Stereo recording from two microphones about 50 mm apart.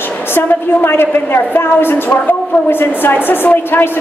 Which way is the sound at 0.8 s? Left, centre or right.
Left.